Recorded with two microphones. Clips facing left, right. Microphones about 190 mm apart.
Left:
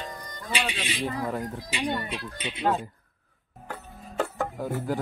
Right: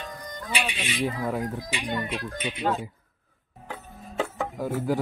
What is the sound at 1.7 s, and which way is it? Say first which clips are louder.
Speech: left 3 dB; 25° left (ahead or behind).